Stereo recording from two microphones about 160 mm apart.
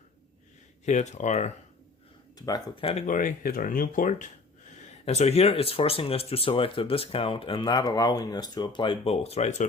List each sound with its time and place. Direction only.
0.9 s speech: 45° left (ahead or behind)
2.4 s speech: 25° left (ahead or behind)
3.1 s speech: 55° left (ahead or behind)
4.8 s speech: 45° left (ahead or behind)